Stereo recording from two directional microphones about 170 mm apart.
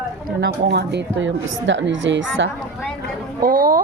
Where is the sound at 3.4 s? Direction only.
55° right (ahead or behind).